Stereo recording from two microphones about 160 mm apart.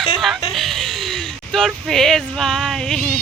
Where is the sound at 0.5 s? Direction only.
Centre (ahead or behind).